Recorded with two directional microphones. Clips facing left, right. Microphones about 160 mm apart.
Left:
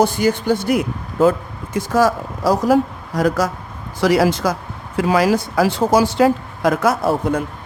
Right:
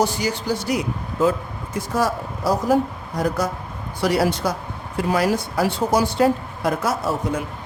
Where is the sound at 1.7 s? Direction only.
90° left.